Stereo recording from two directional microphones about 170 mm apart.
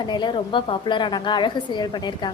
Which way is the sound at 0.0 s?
25° left (ahead or behind).